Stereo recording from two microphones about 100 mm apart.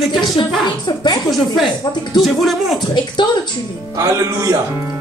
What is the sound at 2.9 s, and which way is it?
Speech, 45° left (ahead or behind).